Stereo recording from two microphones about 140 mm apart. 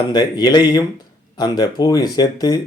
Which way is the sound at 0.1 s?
30° left (ahead or behind).